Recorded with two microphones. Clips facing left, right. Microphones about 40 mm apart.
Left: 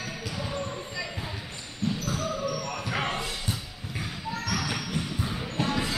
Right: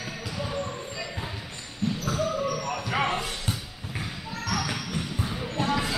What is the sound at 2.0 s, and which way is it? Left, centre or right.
Basketball bounce, right.